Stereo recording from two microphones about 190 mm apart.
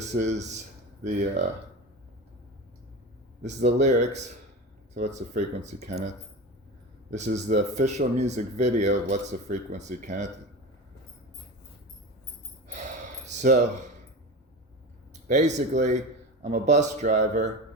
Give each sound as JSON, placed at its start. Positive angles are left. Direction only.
{"t": 0.0, "sound": "a man's voice", "side_deg": -35}
{"t": 3.4, "sound": "speech", "side_deg": -40}
{"t": 7.1, "sound": "speech", "side_deg": -35}
{"t": 12.6, "sound": "sigh", "side_deg": -40}
{"t": 15.1, "sound": "speech", "side_deg": -40}